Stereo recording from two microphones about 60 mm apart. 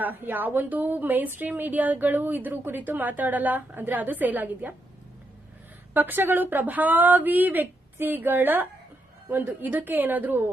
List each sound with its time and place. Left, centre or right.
0.0 s a woman's voice: right
5.9 s a woman's voice: right